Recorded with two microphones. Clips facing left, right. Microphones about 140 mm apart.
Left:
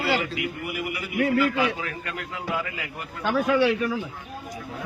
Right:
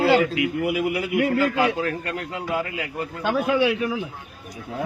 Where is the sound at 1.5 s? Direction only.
40° right (ahead or behind).